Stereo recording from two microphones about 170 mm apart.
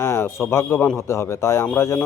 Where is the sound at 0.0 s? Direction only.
15° left (ahead or behind).